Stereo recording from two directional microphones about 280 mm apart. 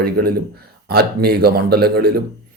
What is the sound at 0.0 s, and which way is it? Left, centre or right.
Speech, right.